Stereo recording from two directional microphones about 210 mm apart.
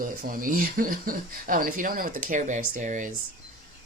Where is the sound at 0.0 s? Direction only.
40° right (ahead or behind).